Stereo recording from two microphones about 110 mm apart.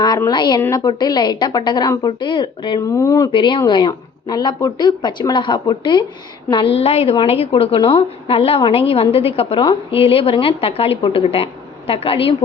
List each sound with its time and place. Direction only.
0.3 s a woman's voice: 40° left (ahead or behind)
2.8 s a woman's voice: 30° left (ahead or behind)
3.3 s a woman's voice: 45° left (ahead or behind)
6.7 s a woman's voice: 65° left (ahead or behind)